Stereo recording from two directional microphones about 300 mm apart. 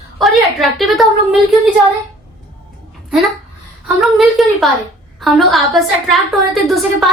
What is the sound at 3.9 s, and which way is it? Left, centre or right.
Speech, centre.